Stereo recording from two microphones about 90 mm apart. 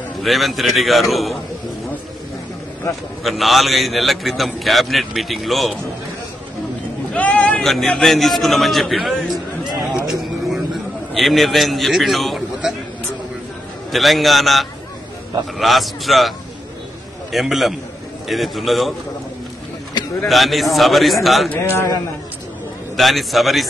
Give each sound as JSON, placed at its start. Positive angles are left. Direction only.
{"t": 0.2, "sound": "a man's voice", "side_deg": 0}
{"t": 3.3, "sound": "a man's voice", "side_deg": 0}
{"t": 7.2, "sound": "a sound", "side_deg": 15}
{"t": 7.6, "sound": "a man's voice", "side_deg": 5}
{"t": 9.9, "sound": "a sound", "side_deg": -5}
{"t": 13.9, "sound": "a man's voice", "side_deg": 0}
{"t": 20.2, "sound": "a man's voice", "side_deg": 0}
{"t": 21.7, "sound": "a man's voice", "side_deg": 35}
{"t": 22.9, "sound": "a man's voice", "side_deg": 0}